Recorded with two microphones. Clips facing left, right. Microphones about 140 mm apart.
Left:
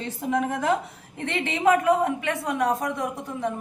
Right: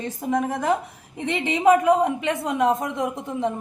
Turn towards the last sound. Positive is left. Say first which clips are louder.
# right 3 dB
turn(degrees=-20)  # may be behind; listen again after turning